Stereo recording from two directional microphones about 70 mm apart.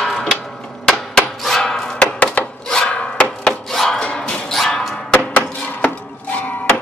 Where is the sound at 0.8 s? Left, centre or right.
Centre.